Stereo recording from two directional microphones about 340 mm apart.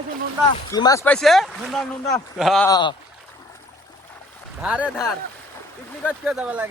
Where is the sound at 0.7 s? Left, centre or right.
Centre.